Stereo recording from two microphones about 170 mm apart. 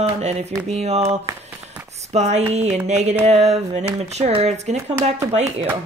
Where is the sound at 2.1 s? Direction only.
40° right (ahead or behind).